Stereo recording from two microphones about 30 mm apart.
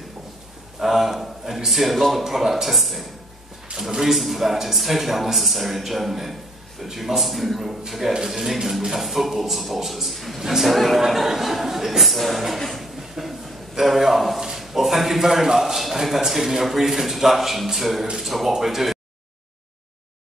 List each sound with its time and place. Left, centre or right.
0.7 s a man's voice: centre
3.7 s a sound: right
4.1 s speech: centre
7.6 s a man's voice: centre
13.2 s a man's voice: centre